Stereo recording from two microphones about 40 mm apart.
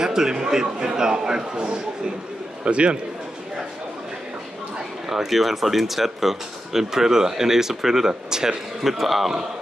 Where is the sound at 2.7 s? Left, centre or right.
Right.